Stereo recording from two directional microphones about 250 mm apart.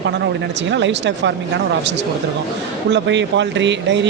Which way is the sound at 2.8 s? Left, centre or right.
Right.